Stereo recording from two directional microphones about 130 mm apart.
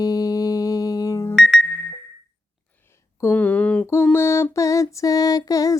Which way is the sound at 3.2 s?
15° left (ahead or behind).